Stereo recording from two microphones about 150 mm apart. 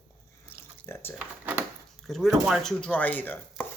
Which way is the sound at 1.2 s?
10° right (ahead or behind).